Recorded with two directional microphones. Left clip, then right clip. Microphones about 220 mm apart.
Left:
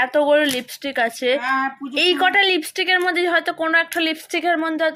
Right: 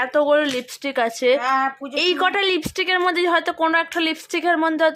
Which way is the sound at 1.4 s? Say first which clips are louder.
Right 1 dB; 30° right (ahead or behind).